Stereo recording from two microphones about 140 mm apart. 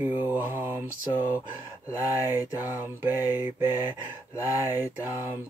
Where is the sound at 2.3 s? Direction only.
15° right (ahead or behind).